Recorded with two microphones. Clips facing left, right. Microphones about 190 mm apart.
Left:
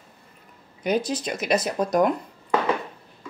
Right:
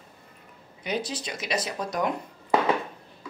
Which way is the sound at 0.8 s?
50° left (ahead or behind).